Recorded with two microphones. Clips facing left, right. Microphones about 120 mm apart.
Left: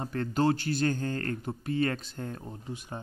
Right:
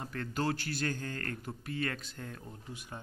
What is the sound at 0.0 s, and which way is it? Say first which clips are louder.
Speech: left 7 dB; 30° left (ahead or behind).